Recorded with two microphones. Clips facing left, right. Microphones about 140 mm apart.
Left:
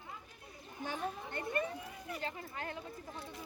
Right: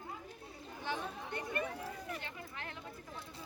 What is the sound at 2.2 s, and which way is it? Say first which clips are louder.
Speech: left 5 dB; 35° left (ahead or behind).